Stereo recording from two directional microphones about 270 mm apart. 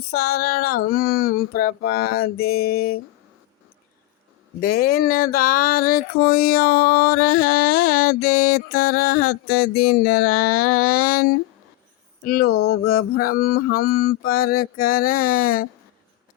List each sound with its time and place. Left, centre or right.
0.1 s speech: left
4.6 s speech: left
12.5 s a sound: left
12.7 s speech: left